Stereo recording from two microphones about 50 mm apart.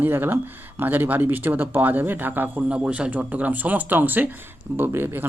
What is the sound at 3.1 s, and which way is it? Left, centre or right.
Speech, right.